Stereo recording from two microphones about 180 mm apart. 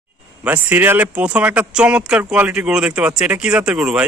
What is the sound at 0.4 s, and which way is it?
Speech, 10° right (ahead or behind).